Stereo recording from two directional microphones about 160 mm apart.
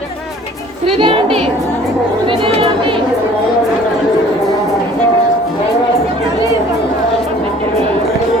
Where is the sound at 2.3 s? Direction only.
35° right (ahead or behind).